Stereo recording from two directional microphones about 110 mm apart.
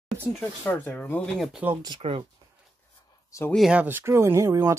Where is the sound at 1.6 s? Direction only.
15° right (ahead or behind).